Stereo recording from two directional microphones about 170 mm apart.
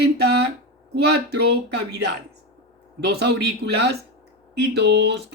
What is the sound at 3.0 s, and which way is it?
A man's voice, 80° right.